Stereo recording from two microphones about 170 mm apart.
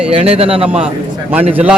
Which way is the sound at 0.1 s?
35° right (ahead or behind).